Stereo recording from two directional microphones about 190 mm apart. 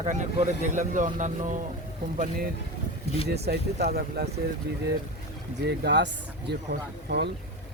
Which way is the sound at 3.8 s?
55° right (ahead or behind).